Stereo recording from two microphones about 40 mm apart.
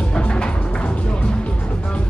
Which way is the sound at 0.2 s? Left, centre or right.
Left.